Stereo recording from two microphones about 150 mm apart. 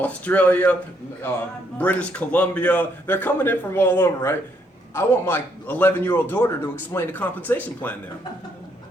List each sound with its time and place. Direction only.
0.0 s a man's voice: 10° left (ahead or behind)
1.8 s a man's voice: 10° left (ahead or behind)